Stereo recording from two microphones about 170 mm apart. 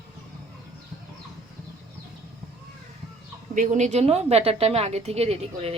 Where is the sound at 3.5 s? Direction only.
50° right (ahead or behind).